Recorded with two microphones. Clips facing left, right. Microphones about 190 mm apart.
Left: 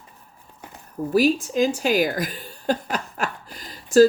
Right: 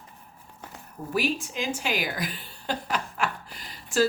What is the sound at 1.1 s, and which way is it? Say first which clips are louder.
A woman's voice: left 9 dB; 40° left (ahead or behind).